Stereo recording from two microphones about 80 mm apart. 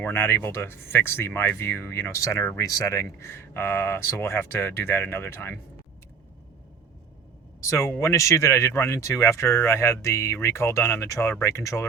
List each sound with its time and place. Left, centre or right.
0.0 s speech: left
7.6 s speech: left